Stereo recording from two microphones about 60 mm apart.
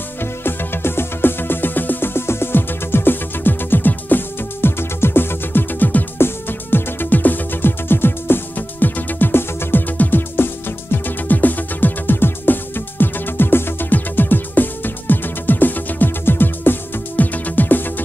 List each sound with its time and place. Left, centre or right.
0.2 s music: left